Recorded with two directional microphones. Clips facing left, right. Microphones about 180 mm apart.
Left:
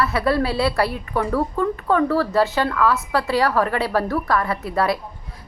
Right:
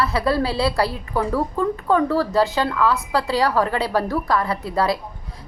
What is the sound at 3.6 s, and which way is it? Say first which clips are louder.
A woman's voice: even; 25° right (ahead or behind).